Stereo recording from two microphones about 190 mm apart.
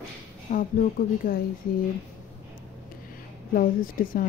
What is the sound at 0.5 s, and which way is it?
Speech, 45° left (ahead or behind).